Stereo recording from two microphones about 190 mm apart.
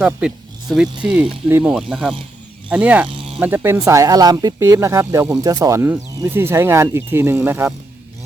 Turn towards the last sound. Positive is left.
turn(degrees=-10)  # may be behind; listen again after turning